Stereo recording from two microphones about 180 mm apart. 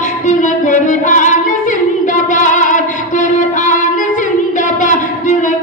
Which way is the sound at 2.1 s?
45° left (ahead or behind).